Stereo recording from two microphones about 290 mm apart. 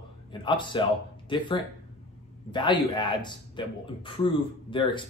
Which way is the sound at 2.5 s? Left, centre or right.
Centre.